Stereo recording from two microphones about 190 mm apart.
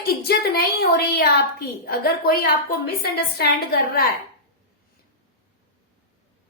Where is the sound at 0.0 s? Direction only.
55° left (ahead or behind).